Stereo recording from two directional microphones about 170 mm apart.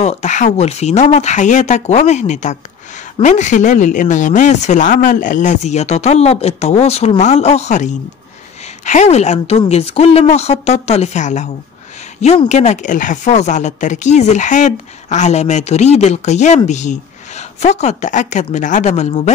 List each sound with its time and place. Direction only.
0.0 s a woman's voice: 40° left (ahead or behind)